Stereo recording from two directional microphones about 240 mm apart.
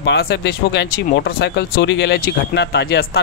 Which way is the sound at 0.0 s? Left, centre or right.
Left.